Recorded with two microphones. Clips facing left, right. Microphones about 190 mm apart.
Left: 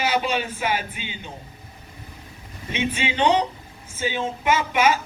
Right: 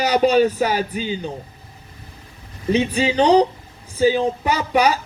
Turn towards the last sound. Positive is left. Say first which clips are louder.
# right 2 dB
turn(degrees=-40)  # may be behind; listen again after turning